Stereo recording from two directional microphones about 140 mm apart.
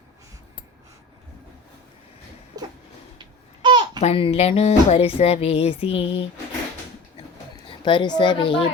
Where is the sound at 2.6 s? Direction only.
25° right (ahead or behind).